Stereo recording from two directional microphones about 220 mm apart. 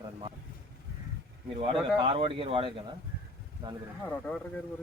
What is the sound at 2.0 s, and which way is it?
Speech, 25° right (ahead or behind).